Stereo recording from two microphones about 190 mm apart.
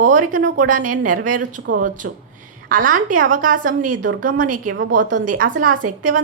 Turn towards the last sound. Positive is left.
turn(degrees=-45)  # may be behind; listen again after turning